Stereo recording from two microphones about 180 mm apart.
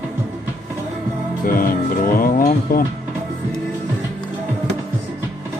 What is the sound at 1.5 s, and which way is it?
Speech, 50° left (ahead or behind).